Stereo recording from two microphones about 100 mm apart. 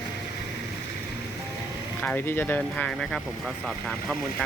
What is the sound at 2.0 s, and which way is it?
Speech, 20° left (ahead or behind).